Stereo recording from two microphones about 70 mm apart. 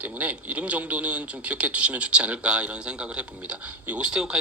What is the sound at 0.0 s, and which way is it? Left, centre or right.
Speech, right.